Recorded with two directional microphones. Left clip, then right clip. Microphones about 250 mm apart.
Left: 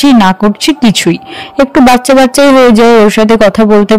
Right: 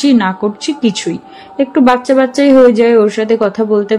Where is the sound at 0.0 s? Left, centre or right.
Left.